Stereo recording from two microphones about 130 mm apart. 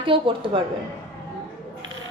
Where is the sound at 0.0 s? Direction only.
40° right (ahead or behind).